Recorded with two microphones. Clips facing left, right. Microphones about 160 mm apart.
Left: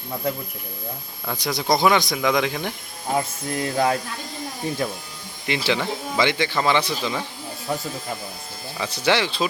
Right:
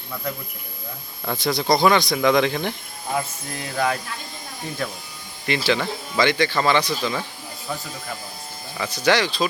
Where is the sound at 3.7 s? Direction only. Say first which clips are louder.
Left 2 dB; 25° left (ahead or behind).